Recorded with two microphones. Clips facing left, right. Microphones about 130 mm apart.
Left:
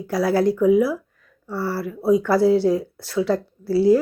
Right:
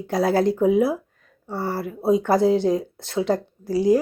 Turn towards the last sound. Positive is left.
turn(degrees=-15)  # may be behind; listen again after turning